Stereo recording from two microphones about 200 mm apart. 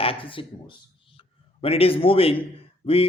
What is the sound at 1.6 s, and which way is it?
Speech, 30° left (ahead or behind).